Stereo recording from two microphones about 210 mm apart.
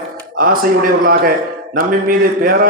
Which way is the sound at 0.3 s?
40° right (ahead or behind).